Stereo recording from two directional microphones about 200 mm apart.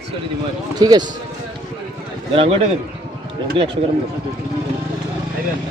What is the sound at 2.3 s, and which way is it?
Speech, 30° right (ahead or behind).